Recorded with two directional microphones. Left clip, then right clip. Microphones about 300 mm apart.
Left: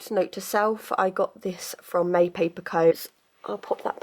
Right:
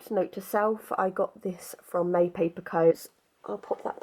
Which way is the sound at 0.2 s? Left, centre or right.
Centre.